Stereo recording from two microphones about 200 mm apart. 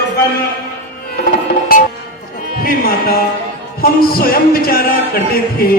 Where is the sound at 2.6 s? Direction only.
50° left (ahead or behind).